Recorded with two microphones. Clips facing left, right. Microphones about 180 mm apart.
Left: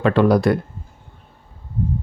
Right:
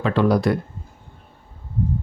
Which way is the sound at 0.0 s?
60° left (ahead or behind).